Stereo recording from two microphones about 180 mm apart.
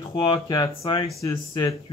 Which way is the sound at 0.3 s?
25° left (ahead or behind).